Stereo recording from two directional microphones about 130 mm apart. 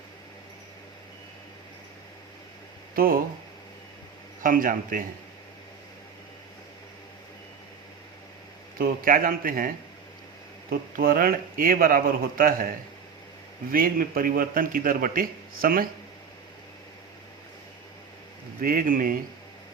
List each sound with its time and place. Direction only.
2.9 s speech: 90° right
4.4 s a man's voice: 90° right
8.8 s a man's voice: 90° right
10.9 s a man's voice: 90° right
13.7 s a man's voice: 90° right
18.6 s a man's voice: 90° right